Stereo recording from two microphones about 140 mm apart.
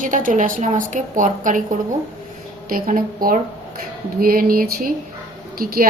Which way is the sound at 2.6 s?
85° right.